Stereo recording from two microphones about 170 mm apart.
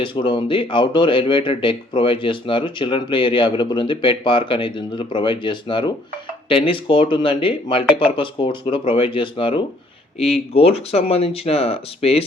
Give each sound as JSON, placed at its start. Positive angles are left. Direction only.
{"t": 0.0, "sound": "speech", "side_deg": 30}